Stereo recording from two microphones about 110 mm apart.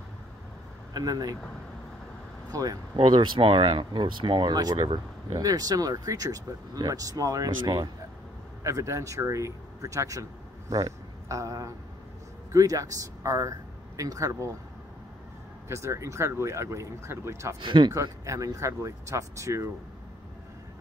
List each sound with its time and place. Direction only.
0.9 s speech: 35° right (ahead or behind)
2.5 s speech: 35° right (ahead or behind)
3.0 s speech: 50° right (ahead or behind)
8.6 s speech: 30° right (ahead or behind)
15.7 s speech: 25° right (ahead or behind)
17.6 s speech: 45° right (ahead or behind)
17.9 s speech: 30° right (ahead or behind)